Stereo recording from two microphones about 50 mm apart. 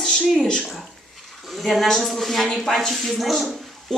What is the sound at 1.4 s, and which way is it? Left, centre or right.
Speech, centre.